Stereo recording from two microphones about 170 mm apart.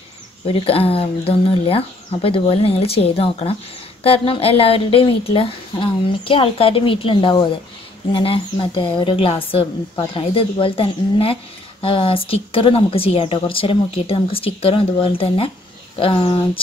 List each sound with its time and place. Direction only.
0.5 s speech: 35° left (ahead or behind)